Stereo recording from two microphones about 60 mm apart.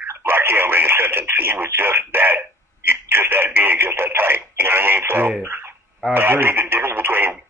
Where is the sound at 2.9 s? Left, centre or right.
Right.